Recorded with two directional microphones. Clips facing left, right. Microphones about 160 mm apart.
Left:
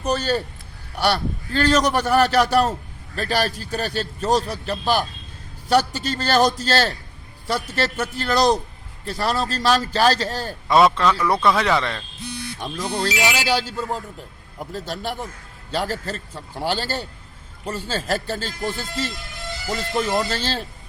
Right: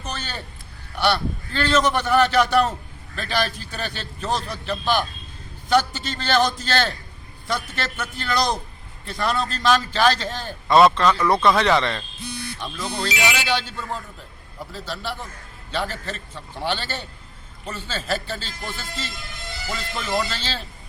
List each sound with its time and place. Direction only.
0.0 s a man's voice: 35° left (ahead or behind)
10.7 s a man's voice: 10° left (ahead or behind)
12.5 s a man's voice: 45° left (ahead or behind)
16.6 s a man's voice: 40° left (ahead or behind)